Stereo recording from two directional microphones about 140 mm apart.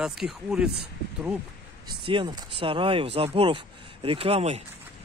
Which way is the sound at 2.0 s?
35° right (ahead or behind).